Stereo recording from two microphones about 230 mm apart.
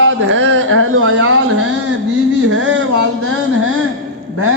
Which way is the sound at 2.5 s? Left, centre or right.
Right.